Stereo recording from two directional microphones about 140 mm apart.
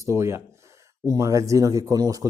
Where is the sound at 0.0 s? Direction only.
20° right (ahead or behind).